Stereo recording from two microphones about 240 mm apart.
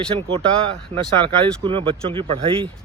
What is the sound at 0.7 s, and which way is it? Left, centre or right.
Speech, right.